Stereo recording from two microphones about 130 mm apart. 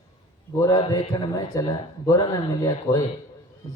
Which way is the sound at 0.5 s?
30° left (ahead or behind).